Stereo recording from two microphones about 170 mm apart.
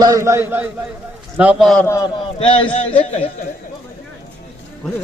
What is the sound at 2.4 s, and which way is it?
Speech, 30° left (ahead or behind).